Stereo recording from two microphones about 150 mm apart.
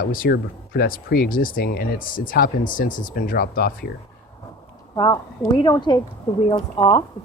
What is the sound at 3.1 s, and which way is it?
Speech, 75° left (ahead or behind).